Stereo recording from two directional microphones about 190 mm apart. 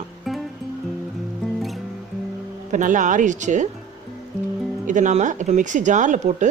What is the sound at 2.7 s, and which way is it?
Speech, 40° right (ahead or behind).